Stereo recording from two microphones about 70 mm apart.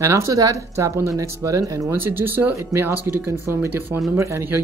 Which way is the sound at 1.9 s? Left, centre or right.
Right.